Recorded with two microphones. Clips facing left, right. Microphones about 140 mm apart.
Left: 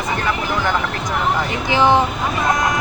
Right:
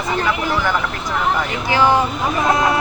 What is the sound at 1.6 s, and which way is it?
Speech, 20° left (ahead or behind).